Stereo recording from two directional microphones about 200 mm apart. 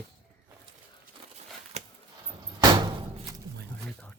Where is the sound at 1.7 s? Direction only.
30° right (ahead or behind).